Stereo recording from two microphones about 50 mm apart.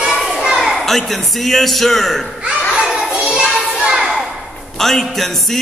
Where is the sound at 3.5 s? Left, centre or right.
Centre.